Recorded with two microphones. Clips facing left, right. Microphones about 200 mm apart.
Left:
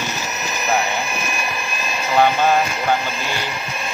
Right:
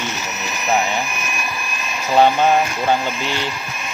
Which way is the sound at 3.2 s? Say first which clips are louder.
Right 2 dB; 15° left (ahead or behind).